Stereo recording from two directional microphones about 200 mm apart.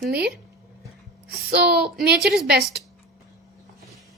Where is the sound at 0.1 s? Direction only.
55° right (ahead or behind).